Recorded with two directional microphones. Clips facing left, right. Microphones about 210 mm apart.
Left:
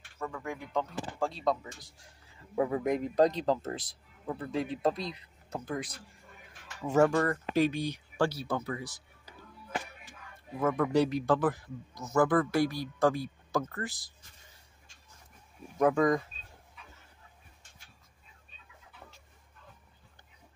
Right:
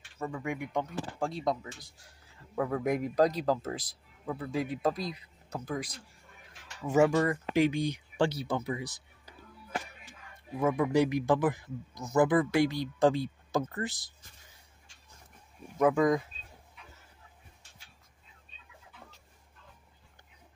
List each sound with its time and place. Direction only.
0.2 s speech: 15° right (ahead or behind)
2.5 s speech: 10° left (ahead or behind)
2.8 s speech: 5° right (ahead or behind)
6.9 s speech: 10° right (ahead or behind)
10.6 s speech: 10° right (ahead or behind)
15.8 s speech: 5° right (ahead or behind)